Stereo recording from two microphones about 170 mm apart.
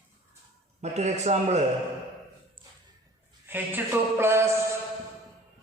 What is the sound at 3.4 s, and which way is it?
A man's voice, 10° right (ahead or behind).